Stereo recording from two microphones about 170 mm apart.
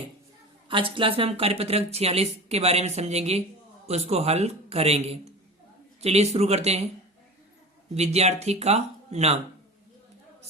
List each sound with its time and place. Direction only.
0.7 s speech: 30° right (ahead or behind)
7.9 s speech: 40° right (ahead or behind)